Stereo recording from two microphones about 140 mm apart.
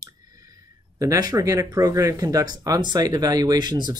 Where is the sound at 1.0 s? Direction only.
25° right (ahead or behind).